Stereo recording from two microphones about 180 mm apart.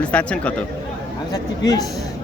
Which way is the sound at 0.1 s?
5° left (ahead or behind).